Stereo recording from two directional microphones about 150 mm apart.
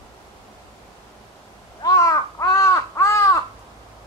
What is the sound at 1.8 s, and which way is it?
Crow, 20° left (ahead or behind).